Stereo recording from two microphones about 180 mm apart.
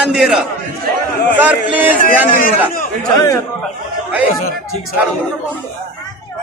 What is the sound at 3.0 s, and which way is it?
Speech, 15° left (ahead or behind).